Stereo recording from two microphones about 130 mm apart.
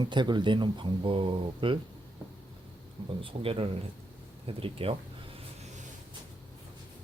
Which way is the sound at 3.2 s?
45° right (ahead or behind).